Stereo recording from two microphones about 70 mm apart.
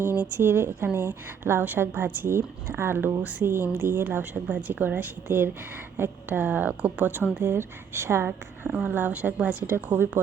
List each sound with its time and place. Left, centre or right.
0.0 s a woman's voice: right
8.6 s a woman's voice: right